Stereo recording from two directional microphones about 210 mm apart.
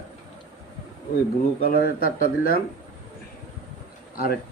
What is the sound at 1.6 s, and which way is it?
Speech, 45° left (ahead or behind).